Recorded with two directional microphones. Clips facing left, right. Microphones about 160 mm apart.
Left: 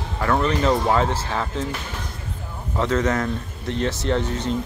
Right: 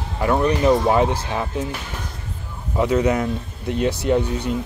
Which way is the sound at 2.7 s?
15° right (ahead or behind).